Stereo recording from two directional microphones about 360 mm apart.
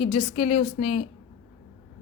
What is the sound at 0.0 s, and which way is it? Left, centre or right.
A woman's voice, centre.